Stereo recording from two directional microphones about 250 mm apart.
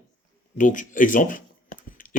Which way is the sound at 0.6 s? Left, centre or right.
Left.